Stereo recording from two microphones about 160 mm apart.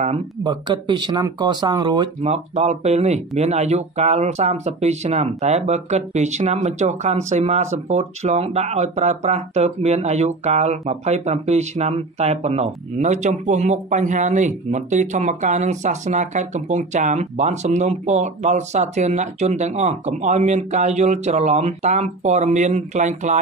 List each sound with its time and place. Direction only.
0.0 s speech: 40° right (ahead or behind)
0.5 s speech: 30° right (ahead or behind)
2.2 s speech: 40° right (ahead or behind)